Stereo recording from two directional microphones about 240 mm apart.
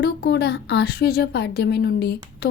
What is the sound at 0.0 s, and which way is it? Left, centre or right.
A woman's voice, left.